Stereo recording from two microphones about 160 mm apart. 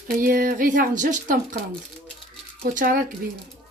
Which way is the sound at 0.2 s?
60° right (ahead or behind).